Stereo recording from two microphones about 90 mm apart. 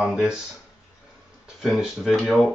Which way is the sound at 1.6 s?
5° right (ahead or behind).